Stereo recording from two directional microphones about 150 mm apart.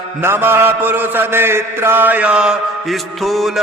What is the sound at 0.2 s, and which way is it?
Mantra, 15° right (ahead or behind).